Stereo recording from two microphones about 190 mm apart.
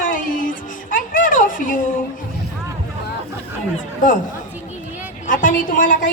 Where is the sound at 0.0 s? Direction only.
45° left (ahead or behind).